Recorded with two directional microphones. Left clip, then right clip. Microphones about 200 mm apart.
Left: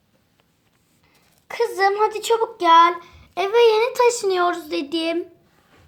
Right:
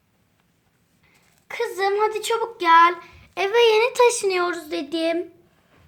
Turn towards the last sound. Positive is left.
turn(degrees=20)  # may be behind; listen again after turning